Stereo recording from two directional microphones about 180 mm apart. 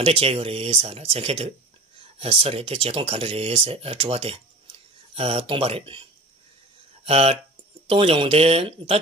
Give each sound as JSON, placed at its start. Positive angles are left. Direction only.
{"t": 0.0, "sound": "speech", "side_deg": -30}
{"t": 7.1, "sound": "speech", "side_deg": -35}